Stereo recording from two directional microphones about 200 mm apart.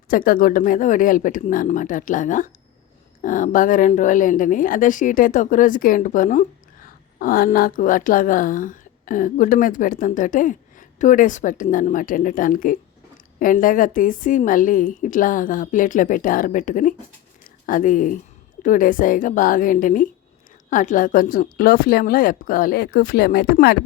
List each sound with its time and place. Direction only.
0.1 s a woman's voice: 45° left (ahead or behind)
17.4 s a sound: 40° left (ahead or behind)
18.6 s speech: 40° left (ahead or behind)